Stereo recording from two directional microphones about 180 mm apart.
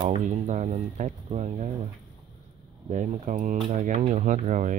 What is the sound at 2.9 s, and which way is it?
Speech, 45° right (ahead or behind).